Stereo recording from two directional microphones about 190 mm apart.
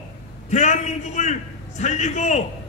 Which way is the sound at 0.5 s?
35° left (ahead or behind).